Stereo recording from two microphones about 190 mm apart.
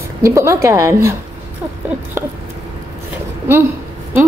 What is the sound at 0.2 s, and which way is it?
Speech, 15° right (ahead or behind).